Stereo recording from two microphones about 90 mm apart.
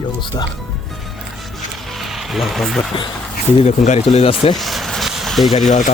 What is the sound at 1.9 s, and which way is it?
Music, centre (ahead or behind).